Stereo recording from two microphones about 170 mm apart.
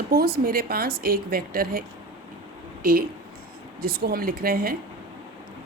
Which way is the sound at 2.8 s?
55° right (ahead or behind).